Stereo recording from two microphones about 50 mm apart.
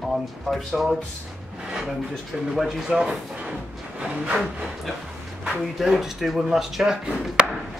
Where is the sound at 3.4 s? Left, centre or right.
Right.